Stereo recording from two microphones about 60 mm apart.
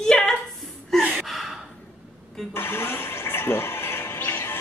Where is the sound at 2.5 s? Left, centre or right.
Left.